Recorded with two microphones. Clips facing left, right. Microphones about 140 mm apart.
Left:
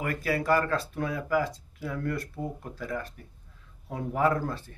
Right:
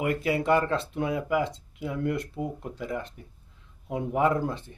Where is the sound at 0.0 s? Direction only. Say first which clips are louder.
Right 3 dB; 20° right (ahead or behind).